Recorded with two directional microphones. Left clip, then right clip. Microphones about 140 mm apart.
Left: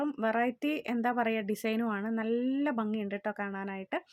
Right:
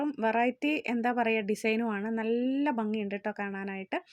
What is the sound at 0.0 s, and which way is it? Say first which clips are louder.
Speech: right 2 dB; 10° right (ahead or behind).